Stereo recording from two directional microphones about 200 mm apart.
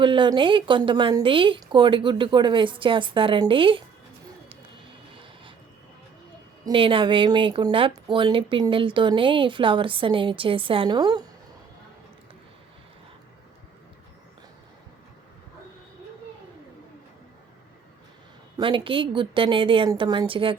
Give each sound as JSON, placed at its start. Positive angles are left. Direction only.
{"t": 0.0, "sound": "speech", "side_deg": -25}
{"t": 6.7, "sound": "speech", "side_deg": -25}
{"t": 18.5, "sound": "speech", "side_deg": -25}